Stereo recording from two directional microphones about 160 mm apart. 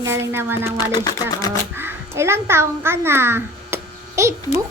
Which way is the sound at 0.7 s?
25° left (ahead or behind).